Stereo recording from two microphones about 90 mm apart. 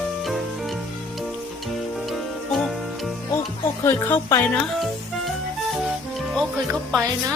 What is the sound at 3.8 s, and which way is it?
Speech, 30° left (ahead or behind).